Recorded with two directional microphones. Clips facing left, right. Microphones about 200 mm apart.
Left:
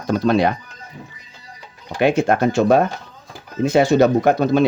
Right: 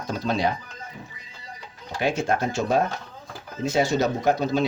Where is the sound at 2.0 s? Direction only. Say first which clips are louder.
Left 8 dB; 60° left (ahead or behind).